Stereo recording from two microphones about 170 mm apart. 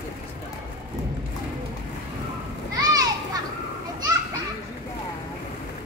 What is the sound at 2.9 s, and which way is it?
Children playing, 20° right (ahead or behind).